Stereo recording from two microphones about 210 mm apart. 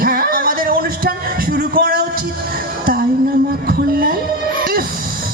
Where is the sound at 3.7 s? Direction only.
45° right (ahead or behind).